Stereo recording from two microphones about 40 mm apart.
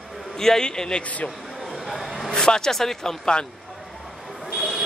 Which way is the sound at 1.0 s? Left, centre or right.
Left.